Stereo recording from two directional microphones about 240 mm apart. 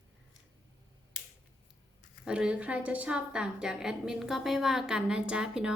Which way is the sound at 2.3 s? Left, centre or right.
Centre.